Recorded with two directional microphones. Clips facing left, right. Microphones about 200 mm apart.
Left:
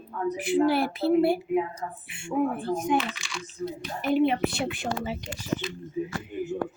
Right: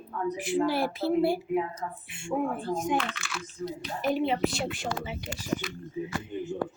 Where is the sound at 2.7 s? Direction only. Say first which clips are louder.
Left 3 dB; 65° left (ahead or behind).